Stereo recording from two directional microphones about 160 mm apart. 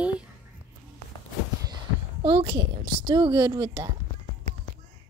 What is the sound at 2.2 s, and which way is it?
A child's voice, 35° right (ahead or behind).